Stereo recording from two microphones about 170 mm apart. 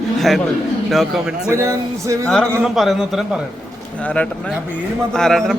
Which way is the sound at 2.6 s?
Centre (ahead or behind).